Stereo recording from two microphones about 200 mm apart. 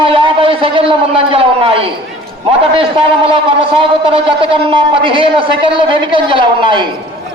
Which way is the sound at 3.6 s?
25° right (ahead or behind).